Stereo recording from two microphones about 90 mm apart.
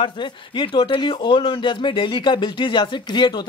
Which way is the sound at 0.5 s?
60° left (ahead or behind).